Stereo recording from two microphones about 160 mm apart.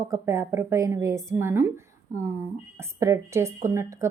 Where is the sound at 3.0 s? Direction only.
20° right (ahead or behind).